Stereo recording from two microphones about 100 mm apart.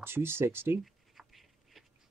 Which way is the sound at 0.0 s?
25° right (ahead or behind).